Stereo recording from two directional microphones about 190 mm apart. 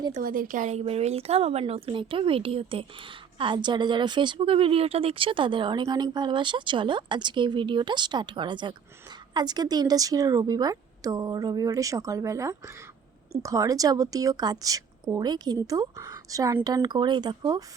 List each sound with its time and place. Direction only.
0.1 s speech: 45° right (ahead or behind); by 17.6 s 20° right (ahead or behind)